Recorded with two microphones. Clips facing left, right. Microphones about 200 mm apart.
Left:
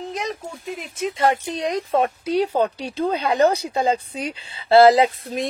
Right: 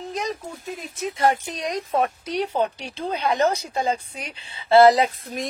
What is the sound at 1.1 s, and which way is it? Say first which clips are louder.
A woman's voice: left 1 dB; 25° left (ahead or behind).